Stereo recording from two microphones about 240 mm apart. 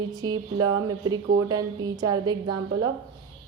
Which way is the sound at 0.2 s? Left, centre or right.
Centre.